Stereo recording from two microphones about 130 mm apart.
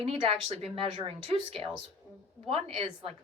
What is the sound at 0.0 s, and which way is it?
A woman's voice, 45° right (ahead or behind).